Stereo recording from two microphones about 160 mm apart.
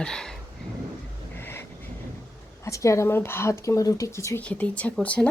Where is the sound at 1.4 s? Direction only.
15° left (ahead or behind).